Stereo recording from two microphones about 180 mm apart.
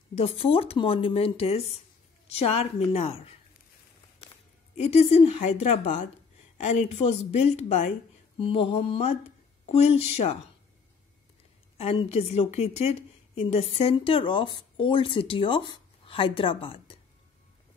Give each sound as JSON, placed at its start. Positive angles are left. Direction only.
{"t": 0.1, "sound": "a woman's voice", "side_deg": 35}
{"t": 4.7, "sound": "a woman's voice", "side_deg": 35}
{"t": 11.7, "sound": "a woman's voice", "side_deg": 35}